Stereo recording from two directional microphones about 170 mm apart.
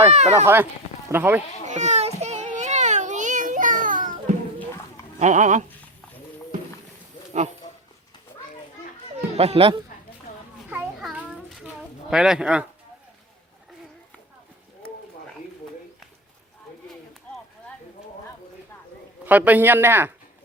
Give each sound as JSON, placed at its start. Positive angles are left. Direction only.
{"t": 0.1, "sound": "speech", "side_deg": -40}
{"t": 0.4, "sound": "speech", "side_deg": -15}
{"t": 1.6, "sound": "child singing", "side_deg": -45}
{"t": 5.2, "sound": "speech", "side_deg": -45}
{"t": 9.3, "sound": "speech", "side_deg": -35}
{"t": 10.3, "sound": "a sound", "side_deg": 50}
{"t": 10.7, "sound": "a sound", "side_deg": -10}
{"t": 12.1, "sound": "speech", "side_deg": -5}
{"t": 19.2, "sound": "a man's voice", "side_deg": -10}